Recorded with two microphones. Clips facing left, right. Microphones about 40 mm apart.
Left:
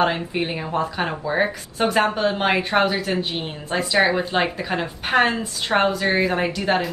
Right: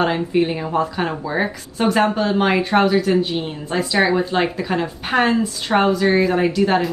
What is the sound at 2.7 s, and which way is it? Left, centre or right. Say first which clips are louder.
Speech: right 3 dB; centre.